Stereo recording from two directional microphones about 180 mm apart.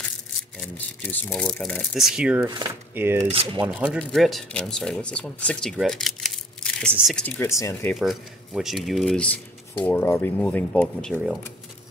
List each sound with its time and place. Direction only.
0.6 s speech: 10° left (ahead or behind)
2.4 s speech: 25° right (ahead or behind)
2.7 s speech: 10° right (ahead or behind)
3.2 s speech: 30° right (ahead or behind)
3.6 s speech: 5° right (ahead or behind); by 7.9 s 15° left (ahead or behind)
7.9 s speech: centre (ahead or behind)